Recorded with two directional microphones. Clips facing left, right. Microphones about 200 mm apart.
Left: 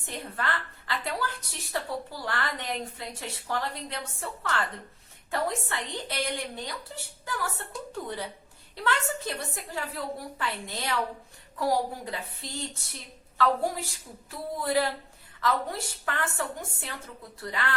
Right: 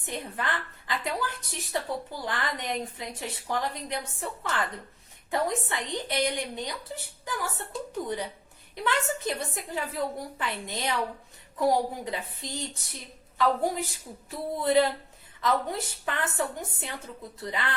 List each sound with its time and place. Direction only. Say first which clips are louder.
0.0 s a woman's voice: right 1 dB; 15° right (ahead or behind)